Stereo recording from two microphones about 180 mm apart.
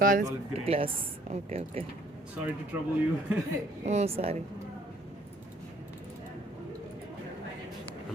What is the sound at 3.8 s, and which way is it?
Speech, 40° right (ahead or behind).